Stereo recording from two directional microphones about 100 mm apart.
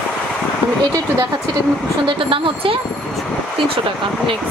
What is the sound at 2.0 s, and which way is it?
Speech, 60° right (ahead or behind).